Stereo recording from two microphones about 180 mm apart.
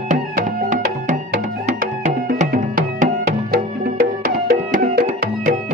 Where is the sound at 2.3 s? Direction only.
45° right (ahead or behind).